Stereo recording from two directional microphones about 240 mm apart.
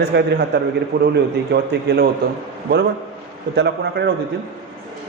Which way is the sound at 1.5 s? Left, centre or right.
Right.